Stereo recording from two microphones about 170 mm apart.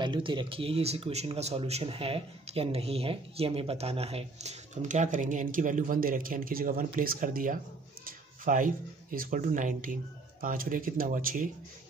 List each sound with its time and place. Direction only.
0.0 s speech: 30° right (ahead or behind); by 11.5 s 50° right (ahead or behind)